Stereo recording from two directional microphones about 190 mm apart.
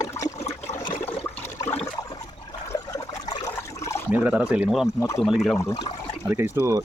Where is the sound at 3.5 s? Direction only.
15° left (ahead or behind).